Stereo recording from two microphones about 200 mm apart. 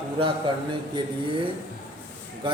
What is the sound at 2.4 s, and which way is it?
Speech, 25° right (ahead or behind).